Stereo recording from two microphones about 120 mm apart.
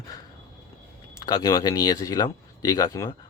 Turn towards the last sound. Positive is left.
turn(degrees=30)  # may be behind; listen again after turning